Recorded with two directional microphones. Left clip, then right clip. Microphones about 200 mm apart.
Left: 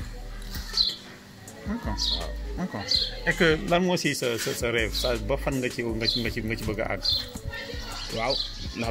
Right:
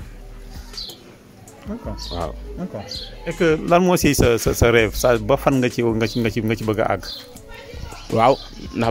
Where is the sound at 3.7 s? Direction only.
55° right (ahead or behind).